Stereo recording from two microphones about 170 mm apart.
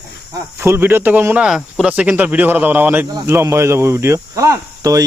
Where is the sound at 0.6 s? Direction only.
15° right (ahead or behind).